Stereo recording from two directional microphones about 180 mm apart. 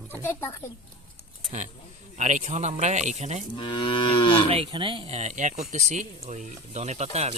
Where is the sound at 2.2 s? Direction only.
40° right (ahead or behind).